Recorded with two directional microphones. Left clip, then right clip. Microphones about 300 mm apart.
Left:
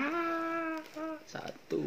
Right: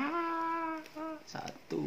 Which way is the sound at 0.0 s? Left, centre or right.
Centre.